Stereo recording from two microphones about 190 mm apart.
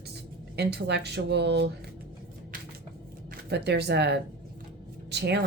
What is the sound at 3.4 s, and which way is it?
Speech, 60° right (ahead or behind).